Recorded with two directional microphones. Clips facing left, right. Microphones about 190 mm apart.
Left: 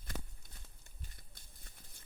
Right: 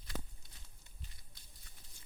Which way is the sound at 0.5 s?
50° left (ahead or behind).